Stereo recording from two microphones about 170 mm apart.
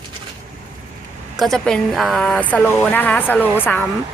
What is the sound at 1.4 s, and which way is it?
Speech, centre (ahead or behind).